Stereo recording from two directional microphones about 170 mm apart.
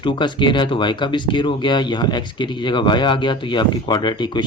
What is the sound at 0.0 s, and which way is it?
Speech, 25° left (ahead or behind).